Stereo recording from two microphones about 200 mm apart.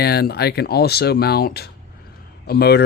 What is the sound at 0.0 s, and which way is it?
Speech, 50° left (ahead or behind).